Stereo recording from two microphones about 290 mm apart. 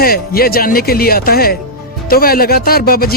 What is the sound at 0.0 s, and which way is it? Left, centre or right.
Speech, left.